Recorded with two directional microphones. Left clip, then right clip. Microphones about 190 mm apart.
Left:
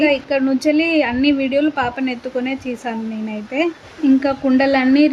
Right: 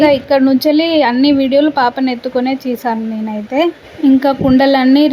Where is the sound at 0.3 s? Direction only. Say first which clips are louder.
Right 6 dB; 15° right (ahead or behind).